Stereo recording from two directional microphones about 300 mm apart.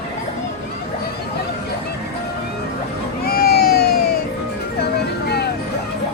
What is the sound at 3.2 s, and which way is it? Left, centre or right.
Vehicle, left.